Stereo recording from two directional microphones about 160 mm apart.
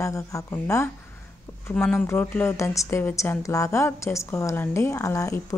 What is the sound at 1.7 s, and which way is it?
Speech, 5° left (ahead or behind).